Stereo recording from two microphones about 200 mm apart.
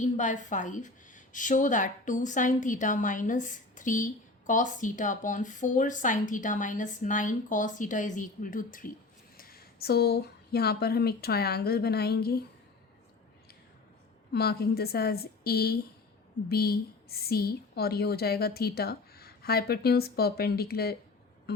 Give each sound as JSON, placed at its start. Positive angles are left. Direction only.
{"t": 0.0, "sound": "a woman's voice", "side_deg": 40}
{"t": 14.3, "sound": "a woman's voice", "side_deg": 50}